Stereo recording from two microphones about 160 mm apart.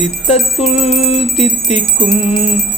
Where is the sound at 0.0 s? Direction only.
40° left (ahead or behind).